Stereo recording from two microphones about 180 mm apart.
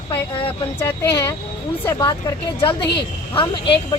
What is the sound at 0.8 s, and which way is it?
A woman's voice, 20° left (ahead or behind).